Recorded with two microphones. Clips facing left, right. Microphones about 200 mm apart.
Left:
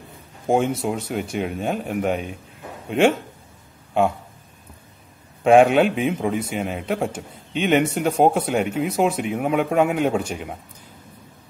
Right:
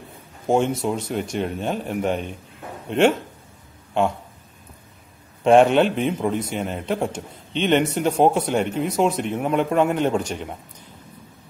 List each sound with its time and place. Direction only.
0.5 s a man's voice: 10° left (ahead or behind)
5.4 s a man's voice: 5° left (ahead or behind)